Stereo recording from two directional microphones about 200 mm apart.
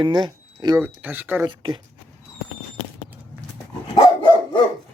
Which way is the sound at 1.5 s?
25° right (ahead or behind).